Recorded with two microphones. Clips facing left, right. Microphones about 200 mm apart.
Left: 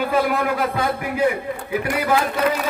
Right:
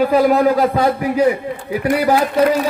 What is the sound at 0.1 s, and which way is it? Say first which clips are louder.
A man's voice: right 7 dB; 40° right (ahead or behind).